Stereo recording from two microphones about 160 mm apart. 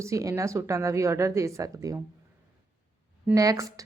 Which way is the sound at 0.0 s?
20° right (ahead or behind).